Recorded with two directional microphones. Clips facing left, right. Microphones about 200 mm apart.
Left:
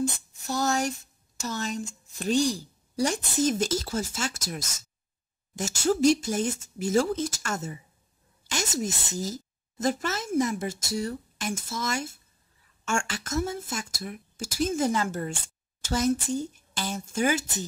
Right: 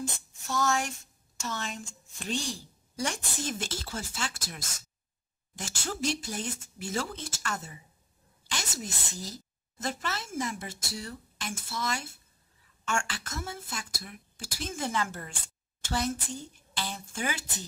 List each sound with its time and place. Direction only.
0.5 s a woman's voice: 35° left (ahead or behind)